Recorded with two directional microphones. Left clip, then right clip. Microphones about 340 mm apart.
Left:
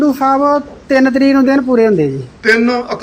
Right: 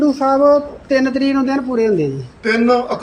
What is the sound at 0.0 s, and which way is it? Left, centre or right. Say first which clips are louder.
A man's voice: left 1 dB; left.